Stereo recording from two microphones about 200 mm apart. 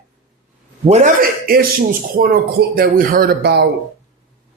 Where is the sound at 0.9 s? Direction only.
35° right (ahead or behind); by 3.7 s 50° right (ahead or behind).